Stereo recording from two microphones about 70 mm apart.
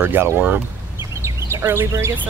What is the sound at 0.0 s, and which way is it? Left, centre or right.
Speech, right.